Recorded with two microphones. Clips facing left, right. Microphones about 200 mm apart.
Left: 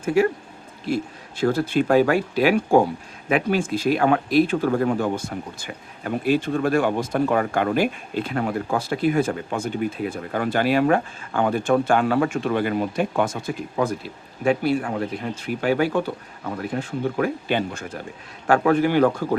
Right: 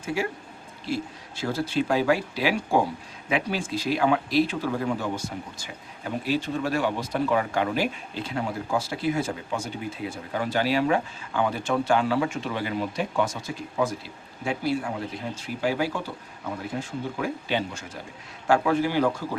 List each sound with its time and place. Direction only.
0.0 s speech: 55° left (ahead or behind)